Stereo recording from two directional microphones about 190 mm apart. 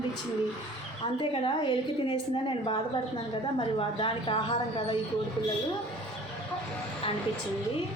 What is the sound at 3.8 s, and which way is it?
A woman's voice, 25° left (ahead or behind).